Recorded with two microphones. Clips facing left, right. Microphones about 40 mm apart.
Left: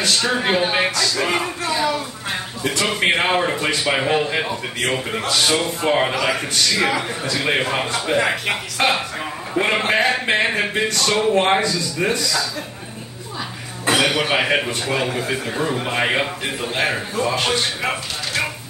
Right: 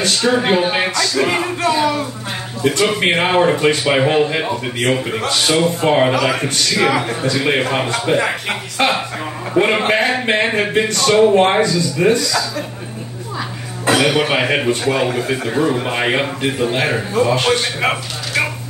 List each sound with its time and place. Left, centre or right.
0.1 s a man's voice: centre
1.0 s a man's voice: centre
1.8 s speech: right
2.9 s a man's voice: centre
13.8 s a man's voice: centre; by 18.5 s right